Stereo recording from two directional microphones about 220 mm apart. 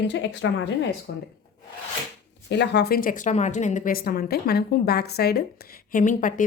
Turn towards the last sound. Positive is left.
turn(degrees=35)  # may be behind; listen again after turning